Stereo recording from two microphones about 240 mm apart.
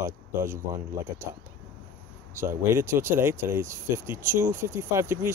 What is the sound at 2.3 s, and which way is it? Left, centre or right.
Speech, centre.